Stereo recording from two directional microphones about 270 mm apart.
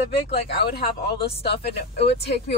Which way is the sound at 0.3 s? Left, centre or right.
Left.